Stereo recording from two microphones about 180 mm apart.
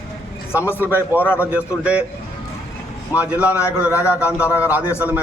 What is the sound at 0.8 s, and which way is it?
Speech, 10° right (ahead or behind).